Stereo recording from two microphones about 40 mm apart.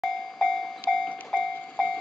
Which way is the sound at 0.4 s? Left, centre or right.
Left.